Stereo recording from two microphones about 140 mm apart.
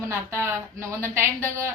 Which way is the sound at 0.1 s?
20° right (ahead or behind).